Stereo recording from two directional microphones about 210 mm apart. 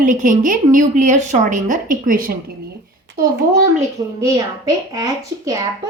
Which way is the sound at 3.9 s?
15° right (ahead or behind).